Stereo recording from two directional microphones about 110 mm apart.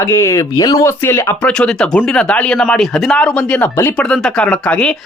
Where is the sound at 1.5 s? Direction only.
5° left (ahead or behind).